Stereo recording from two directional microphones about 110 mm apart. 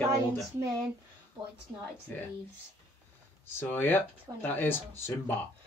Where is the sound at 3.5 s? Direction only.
15° left (ahead or behind).